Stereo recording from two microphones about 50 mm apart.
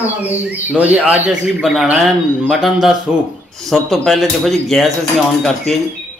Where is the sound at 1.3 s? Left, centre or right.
Centre.